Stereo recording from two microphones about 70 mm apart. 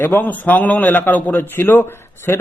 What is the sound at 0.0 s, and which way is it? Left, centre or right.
A man's voice, left.